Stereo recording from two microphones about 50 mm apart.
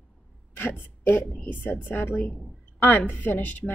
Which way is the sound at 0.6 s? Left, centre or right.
Left.